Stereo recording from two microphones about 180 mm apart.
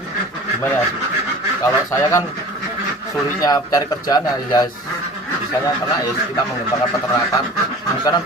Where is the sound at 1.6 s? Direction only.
15° left (ahead or behind).